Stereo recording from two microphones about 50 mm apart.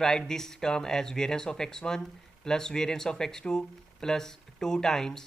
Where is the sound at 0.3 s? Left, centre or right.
Centre.